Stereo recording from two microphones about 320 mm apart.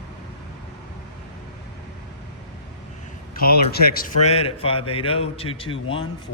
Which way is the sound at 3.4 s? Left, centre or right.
Left.